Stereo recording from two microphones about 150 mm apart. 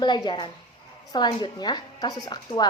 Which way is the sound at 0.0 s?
30° left (ahead or behind).